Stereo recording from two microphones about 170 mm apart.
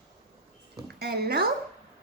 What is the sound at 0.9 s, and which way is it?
Speech, 70° right (ahead or behind).